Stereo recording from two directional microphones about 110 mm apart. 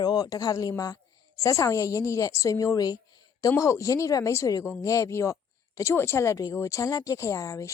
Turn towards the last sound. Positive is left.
turn(degrees=30)  # may be behind; listen again after turning